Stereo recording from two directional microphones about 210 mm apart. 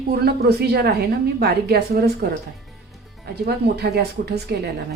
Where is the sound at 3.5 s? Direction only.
50° right (ahead or behind).